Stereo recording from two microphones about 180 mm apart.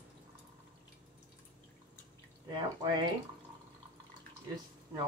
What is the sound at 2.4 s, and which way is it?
Speech, 25° right (ahead or behind).